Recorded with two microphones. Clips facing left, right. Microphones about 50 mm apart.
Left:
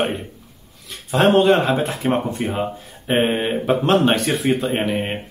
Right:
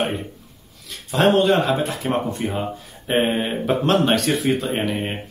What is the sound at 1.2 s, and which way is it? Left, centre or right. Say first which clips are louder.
A man's voice: left 2 dB; left.